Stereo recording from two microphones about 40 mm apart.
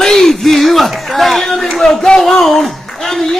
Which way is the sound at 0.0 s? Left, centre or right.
Centre.